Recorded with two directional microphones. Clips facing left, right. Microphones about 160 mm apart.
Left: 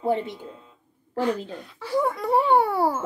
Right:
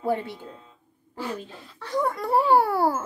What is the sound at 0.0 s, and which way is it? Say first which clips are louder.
Speech: left 2 dB; 20° left (ahead or behind).